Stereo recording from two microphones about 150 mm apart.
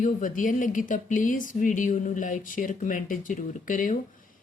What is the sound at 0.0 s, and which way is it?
Speech, 60° left (ahead or behind).